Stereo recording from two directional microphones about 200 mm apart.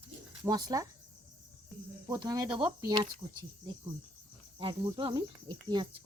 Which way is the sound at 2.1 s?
20° right (ahead or behind).